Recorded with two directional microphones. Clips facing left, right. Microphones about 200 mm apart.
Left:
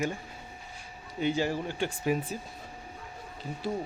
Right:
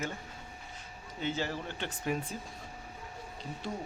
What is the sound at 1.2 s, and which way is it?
Speech, 15° left (ahead or behind).